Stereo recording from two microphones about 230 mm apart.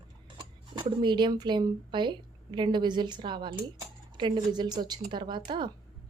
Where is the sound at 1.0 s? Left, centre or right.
Centre.